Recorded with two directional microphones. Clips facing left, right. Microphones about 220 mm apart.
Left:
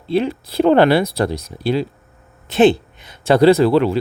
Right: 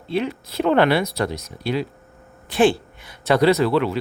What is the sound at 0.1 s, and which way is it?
Speech, 30° left (ahead or behind).